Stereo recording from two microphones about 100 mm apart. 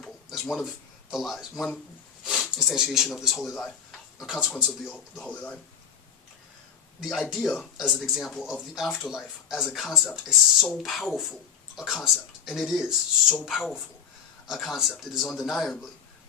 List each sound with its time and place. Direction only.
0.0 s a sound: centre (ahead or behind)
1.1 s speech: centre (ahead or behind)
5.3 s speech: 15° left (ahead or behind)
7.0 s speech: centre (ahead or behind)